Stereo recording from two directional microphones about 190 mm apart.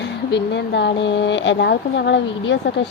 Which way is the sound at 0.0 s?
65° left (ahead or behind).